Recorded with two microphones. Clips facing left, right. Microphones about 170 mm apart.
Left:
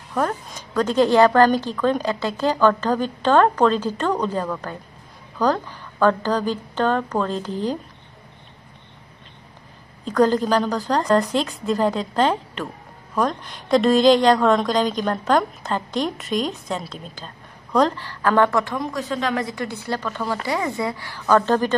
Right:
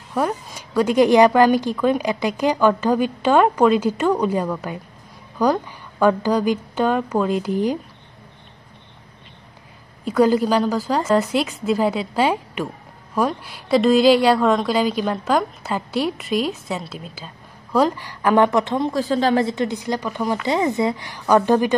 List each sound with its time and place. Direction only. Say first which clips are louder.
0.1 s a woman's voice: right 1 dB; 10° right (ahead or behind)
10.0 s a woman's voice: right 2 dB; 10° right (ahead or behind)